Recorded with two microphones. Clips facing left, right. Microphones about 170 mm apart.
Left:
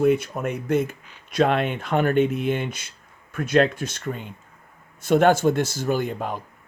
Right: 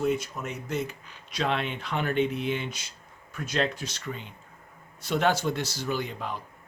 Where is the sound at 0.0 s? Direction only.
60° left (ahead or behind).